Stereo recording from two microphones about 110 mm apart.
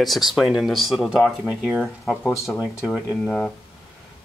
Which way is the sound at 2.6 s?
5° right (ahead or behind).